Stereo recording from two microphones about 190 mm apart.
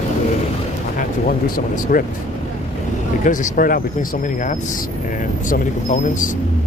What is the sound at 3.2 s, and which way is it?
Speech, 45° left (ahead or behind).